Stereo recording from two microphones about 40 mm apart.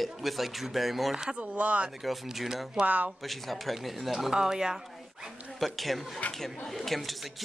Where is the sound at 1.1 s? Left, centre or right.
Centre.